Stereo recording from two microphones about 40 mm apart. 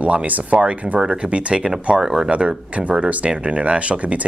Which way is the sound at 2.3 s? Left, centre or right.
Right.